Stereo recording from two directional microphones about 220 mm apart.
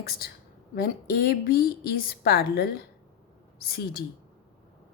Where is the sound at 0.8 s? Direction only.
45° left (ahead or behind).